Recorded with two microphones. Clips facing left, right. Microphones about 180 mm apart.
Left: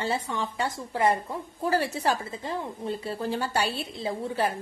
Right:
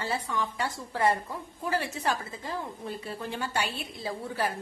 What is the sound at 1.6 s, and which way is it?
A woman's voice, 35° left (ahead or behind).